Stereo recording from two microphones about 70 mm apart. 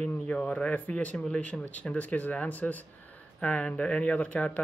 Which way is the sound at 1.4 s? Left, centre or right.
Centre.